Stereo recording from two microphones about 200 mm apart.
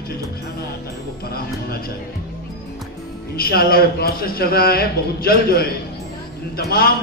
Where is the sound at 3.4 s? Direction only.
50° left (ahead or behind).